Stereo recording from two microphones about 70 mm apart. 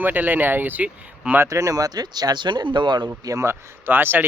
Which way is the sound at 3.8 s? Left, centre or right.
Right.